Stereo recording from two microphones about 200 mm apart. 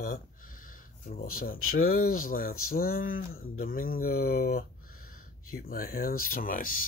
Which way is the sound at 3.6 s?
45° left (ahead or behind).